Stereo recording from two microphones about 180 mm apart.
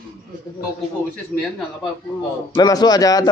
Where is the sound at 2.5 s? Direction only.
20° left (ahead or behind).